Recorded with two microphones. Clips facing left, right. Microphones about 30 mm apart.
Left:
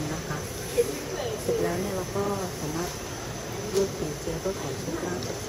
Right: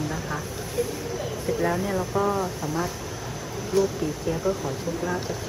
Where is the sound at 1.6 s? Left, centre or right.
Right.